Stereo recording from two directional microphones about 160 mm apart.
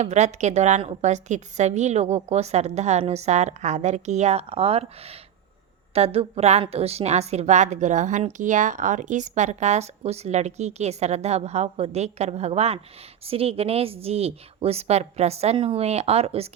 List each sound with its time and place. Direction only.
0.0 s a woman's voice: 45° right (ahead or behind)